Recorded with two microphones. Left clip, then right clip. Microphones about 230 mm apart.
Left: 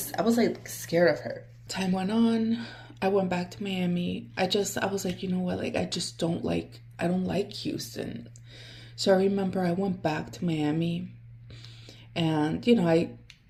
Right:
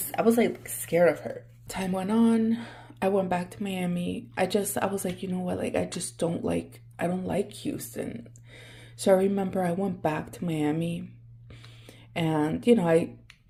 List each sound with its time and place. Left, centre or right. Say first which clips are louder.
0.1 s speech: right 2 dB; right
1.6 s speech: even; right
12.1 s speech: right 1 dB; right